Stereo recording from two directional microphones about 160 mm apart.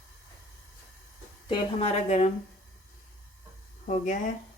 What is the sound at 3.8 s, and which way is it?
Speech, 50° left (ahead or behind).